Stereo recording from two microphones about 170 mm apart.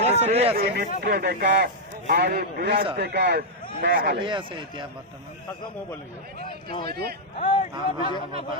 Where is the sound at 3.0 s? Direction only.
75° right (ahead or behind).